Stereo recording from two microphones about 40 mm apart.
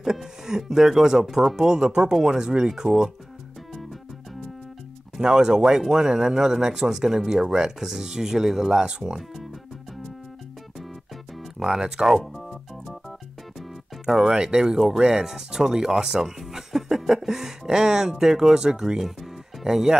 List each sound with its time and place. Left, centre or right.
0.0 s speech: centre
1.6 s speech: centre
5.2 s speech: centre
11.6 s speech: centre
12.4 s music: centre
14.3 s speech: centre